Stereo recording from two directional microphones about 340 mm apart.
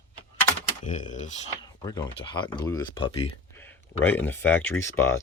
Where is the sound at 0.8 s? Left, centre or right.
Left.